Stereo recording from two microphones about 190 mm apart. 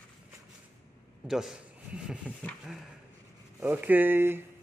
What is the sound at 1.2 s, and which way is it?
Speech, centre (ahead or behind).